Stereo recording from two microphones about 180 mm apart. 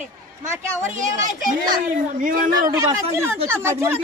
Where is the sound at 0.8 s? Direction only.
45° right (ahead or behind).